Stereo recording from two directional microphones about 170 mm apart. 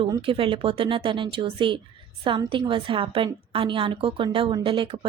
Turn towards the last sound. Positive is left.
turn(degrees=-30)  # may be behind; listen again after turning